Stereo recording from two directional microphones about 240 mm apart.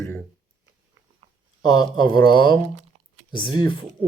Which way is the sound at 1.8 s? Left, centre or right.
Centre.